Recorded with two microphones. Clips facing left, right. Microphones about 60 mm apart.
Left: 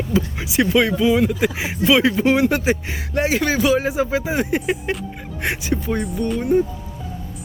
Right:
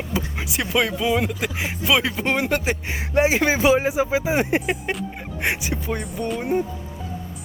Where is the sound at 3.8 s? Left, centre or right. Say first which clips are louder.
Even; centre.